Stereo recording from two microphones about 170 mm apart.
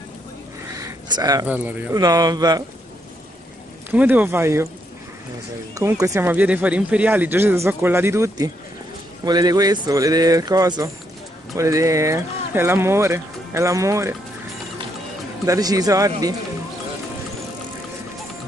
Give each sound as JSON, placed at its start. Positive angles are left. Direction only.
{"t": 0.7, "sound": "a sound", "side_deg": -20}
{"t": 1.5, "sound": "speech", "side_deg": -10}
{"t": 2.0, "sound": "speech", "side_deg": -25}
{"t": 3.9, "sound": "speech", "side_deg": -10}
{"t": 5.8, "sound": "speech", "side_deg": -20}
{"t": 15.4, "sound": "speech", "side_deg": -20}